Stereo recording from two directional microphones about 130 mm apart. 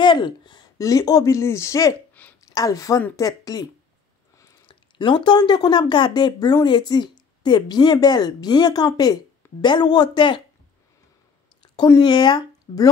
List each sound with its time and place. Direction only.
0.0 s speech: 35° left (ahead or behind)
2.2 s a sound: 10° left (ahead or behind)
2.5 s speech: 25° left (ahead or behind)
4.6 s speech: 35° left (ahead or behind)
11.6 s a sound: 35° left (ahead or behind)
12.0 s speech: 35° left (ahead or behind)